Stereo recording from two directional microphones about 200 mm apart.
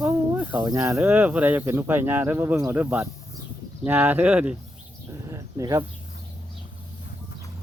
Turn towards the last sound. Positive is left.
turn(degrees=-15)  # may be behind; listen again after turning